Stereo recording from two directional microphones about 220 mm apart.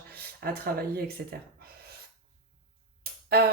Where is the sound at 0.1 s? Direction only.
45° right (ahead or behind).